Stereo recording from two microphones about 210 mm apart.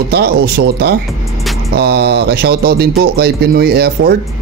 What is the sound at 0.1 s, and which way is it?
Music, 50° right (ahead or behind).